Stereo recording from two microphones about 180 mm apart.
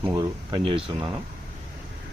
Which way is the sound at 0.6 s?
30° right (ahead or behind).